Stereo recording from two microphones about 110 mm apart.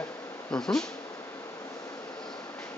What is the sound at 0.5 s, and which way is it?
Speech, 5° left (ahead or behind).